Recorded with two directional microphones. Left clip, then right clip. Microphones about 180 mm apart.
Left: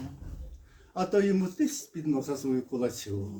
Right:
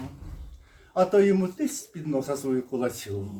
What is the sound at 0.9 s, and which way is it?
Speech, 20° right (ahead or behind).